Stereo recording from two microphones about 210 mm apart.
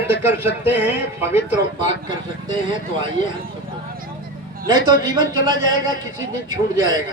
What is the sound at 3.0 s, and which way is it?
Speech, 25° right (ahead or behind).